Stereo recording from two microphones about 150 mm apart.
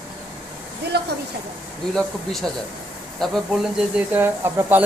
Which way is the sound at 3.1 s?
Centre (ahead or behind).